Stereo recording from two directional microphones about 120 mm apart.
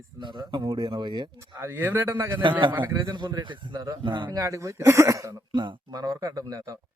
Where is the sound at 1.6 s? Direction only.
20° right (ahead or behind).